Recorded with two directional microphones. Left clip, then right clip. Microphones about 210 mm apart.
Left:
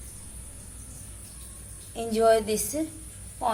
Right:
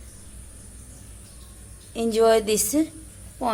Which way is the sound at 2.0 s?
40° right (ahead or behind).